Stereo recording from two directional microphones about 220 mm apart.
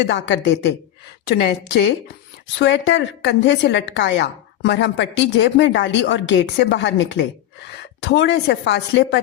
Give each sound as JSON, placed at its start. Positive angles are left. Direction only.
{"t": 0.0, "sound": "a woman's voice", "side_deg": 55}